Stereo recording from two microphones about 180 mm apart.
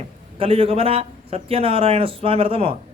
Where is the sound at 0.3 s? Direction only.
30° right (ahead or behind).